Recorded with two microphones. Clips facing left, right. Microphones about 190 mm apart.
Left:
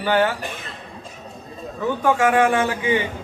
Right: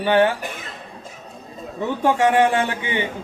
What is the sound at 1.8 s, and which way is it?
A man's voice, 25° right (ahead or behind).